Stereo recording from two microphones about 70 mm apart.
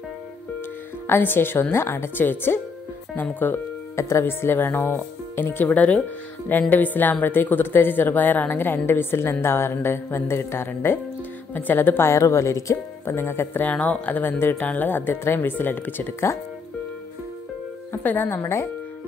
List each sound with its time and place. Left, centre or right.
1.0 s a woman's voice: left
3.9 s a woman's voice: left
11.5 s a woman's voice: left
13.1 s a woman's voice: left
13.7 s speech: centre; by 16.3 s left
17.9 s speech: left